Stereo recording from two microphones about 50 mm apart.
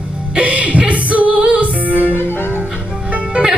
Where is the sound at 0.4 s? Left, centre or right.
Right.